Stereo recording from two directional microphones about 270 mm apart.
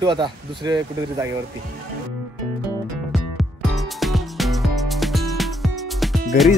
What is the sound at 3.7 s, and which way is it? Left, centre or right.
Music, centre.